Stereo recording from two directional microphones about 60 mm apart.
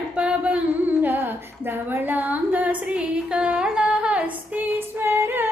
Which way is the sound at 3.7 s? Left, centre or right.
Centre.